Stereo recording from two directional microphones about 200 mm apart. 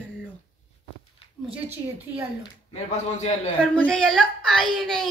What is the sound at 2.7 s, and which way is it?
Speech, 30° left (ahead or behind).